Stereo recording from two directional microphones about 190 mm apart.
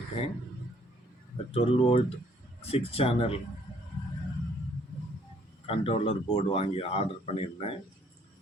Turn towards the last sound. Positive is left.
turn(degrees=30)  # may be behind; listen again after turning